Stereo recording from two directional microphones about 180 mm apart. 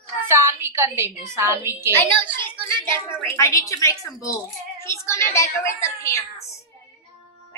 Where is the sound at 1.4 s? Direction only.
15° right (ahead or behind).